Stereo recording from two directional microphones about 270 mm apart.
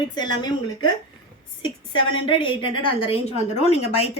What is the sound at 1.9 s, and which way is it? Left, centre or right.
A woman's voice, centre.